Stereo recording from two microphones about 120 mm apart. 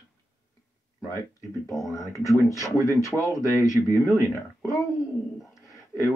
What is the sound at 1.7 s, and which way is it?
Speech, 25° left (ahead or behind).